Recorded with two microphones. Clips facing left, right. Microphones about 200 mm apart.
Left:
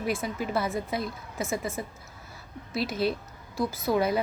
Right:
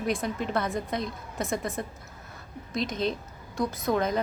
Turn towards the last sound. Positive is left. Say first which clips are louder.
# left 1 dB
turn(degrees=10)  # may be behind; listen again after turning